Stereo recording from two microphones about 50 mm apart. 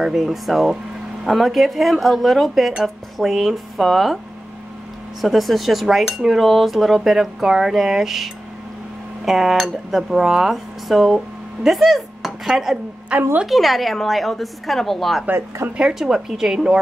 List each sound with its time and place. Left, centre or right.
0.0 s speech: centre
5.2 s speech: centre
13.1 s a woman's voice: right
13.5 s a woman's voice: centre